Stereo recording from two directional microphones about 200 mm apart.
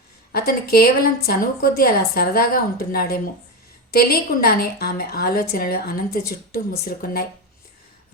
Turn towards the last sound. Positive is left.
turn(degrees=50)  # may be behind; listen again after turning